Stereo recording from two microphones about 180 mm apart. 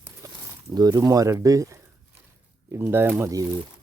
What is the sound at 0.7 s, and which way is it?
Speech, 20° right (ahead or behind).